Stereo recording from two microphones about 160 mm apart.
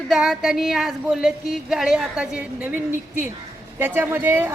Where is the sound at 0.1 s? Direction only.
Centre (ahead or behind).